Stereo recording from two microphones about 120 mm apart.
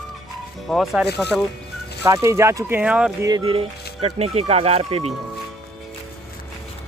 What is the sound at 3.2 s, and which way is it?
Speech, 30° right (ahead or behind).